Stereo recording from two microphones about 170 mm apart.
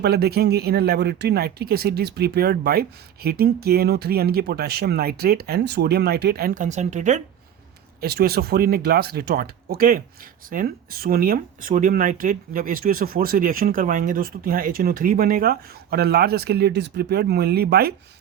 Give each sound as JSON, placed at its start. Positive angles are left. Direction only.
{"t": 0.0, "sound": "speech", "side_deg": -70}
{"t": 8.0, "sound": "speech", "side_deg": -65}